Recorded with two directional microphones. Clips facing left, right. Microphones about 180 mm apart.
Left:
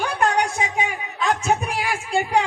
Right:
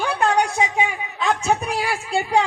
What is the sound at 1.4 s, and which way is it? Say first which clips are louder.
Speech: right 1 dB; 35° right (ahead or behind).